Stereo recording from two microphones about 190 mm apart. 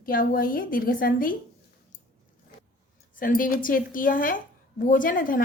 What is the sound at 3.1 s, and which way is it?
A woman's voice, 45° left (ahead or behind).